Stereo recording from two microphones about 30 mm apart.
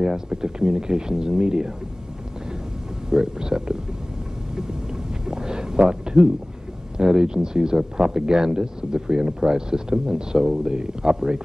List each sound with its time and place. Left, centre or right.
0.3 s speech: right
3.1 s speech: right
5.2 s a sound: right
7.0 s speech: right